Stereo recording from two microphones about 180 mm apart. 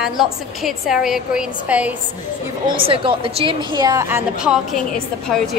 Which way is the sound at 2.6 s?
30° right (ahead or behind).